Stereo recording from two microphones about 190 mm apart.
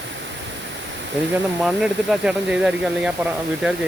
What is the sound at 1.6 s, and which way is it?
Speech, 5° right (ahead or behind).